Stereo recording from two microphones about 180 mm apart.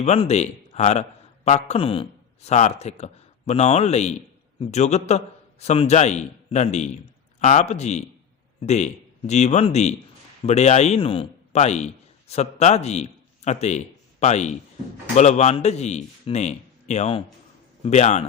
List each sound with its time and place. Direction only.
0.0 s a man's voice: 40° left (ahead or behind)